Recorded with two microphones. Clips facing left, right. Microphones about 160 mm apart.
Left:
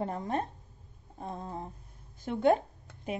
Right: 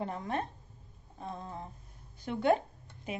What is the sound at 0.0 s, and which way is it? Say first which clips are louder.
Speech: left 2 dB; 40° left (ahead or behind).